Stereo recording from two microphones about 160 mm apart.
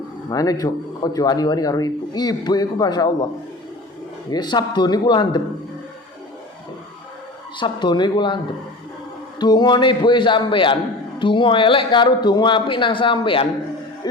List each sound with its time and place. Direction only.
0.3 s speech: 25° left (ahead or behind)
4.3 s speech: 25° left (ahead or behind)
7.6 s speech: 30° left (ahead or behind)
9.4 s a man's voice: 25° left (ahead or behind)